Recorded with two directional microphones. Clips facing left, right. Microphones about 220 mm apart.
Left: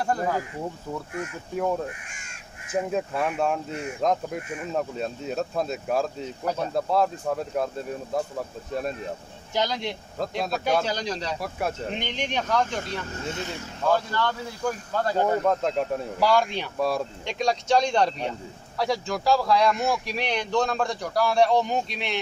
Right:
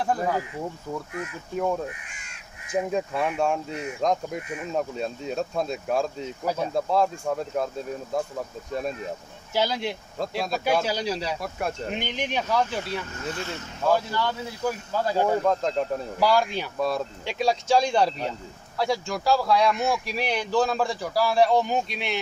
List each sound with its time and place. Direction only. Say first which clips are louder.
0.0 s speech: even; centre (ahead or behind)
2.7 s speech: even; centre (ahead or behind)
9.5 s speech: right 1 dB; 5° right (ahead or behind)
13.3 s speech: right 1 dB; 20° left (ahead or behind)
13.8 s speech: even; 10° right (ahead or behind)